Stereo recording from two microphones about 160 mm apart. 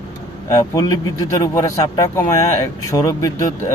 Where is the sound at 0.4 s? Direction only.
20° left (ahead or behind).